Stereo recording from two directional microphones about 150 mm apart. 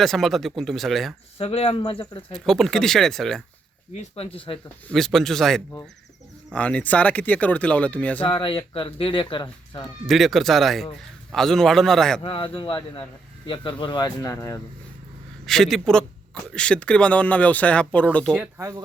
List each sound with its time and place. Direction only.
0.0 s a man's voice: centre (ahead or behind)
1.4 s speech: 40° left (ahead or behind)
2.3 s a man's voice: centre (ahead or behind)
3.9 s speech: 40° left (ahead or behind)
4.9 s a man's voice: centre (ahead or behind)
8.2 s speech: 35° left (ahead or behind)
10.1 s a man's voice: centre (ahead or behind)
12.2 s speech: 35° left (ahead or behind); by 14.6 s 20° left (ahead or behind)
15.4 s speech: centre (ahead or behind)